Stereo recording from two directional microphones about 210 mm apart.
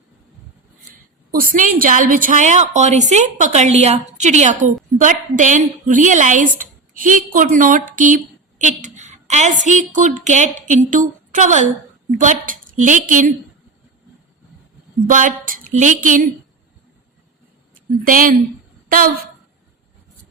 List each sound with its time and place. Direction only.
1.3 s a woman's voice: 40° right (ahead or behind)
15.0 s a woman's voice: 40° right (ahead or behind)
18.0 s a woman's voice: 40° right (ahead or behind)